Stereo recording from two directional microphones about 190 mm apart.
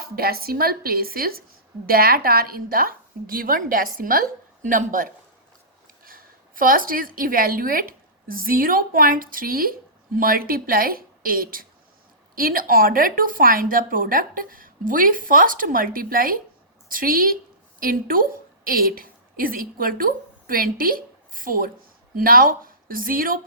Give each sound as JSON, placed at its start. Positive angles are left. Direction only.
{"t": 0.0, "sound": "a woman's voice", "side_deg": -55}